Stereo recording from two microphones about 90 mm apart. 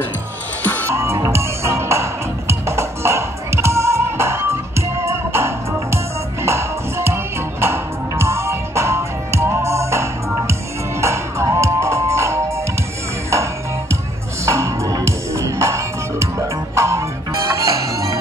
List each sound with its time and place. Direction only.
0.8 s music: 30° right (ahead or behind)